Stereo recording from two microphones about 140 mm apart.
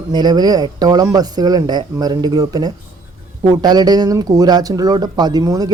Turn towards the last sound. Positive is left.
turn(degrees=-25)  # may be behind; listen again after turning